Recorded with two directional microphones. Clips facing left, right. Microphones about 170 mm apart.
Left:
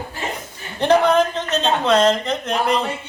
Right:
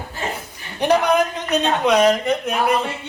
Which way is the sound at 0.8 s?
10° right (ahead or behind).